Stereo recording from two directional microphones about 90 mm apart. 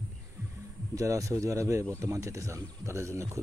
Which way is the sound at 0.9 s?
35° right (ahead or behind).